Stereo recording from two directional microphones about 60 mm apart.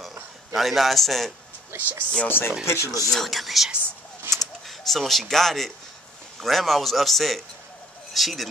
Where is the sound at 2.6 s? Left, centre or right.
Left.